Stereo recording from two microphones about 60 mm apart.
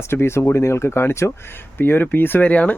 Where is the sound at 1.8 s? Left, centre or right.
Left.